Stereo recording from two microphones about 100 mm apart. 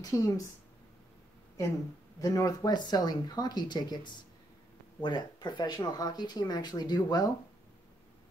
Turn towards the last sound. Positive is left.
turn(degrees=45)  # may be behind; listen again after turning